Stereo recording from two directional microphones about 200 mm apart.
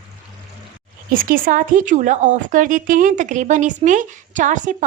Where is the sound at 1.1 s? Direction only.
45° right (ahead or behind).